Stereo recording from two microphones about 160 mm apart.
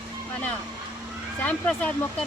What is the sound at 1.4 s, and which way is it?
Speech, 10° left (ahead or behind).